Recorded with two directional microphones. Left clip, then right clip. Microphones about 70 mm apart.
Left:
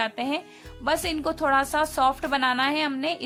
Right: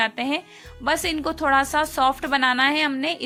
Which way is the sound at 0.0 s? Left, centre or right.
Right.